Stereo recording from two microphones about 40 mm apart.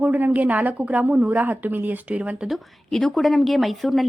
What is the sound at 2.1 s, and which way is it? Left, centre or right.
Speech, right.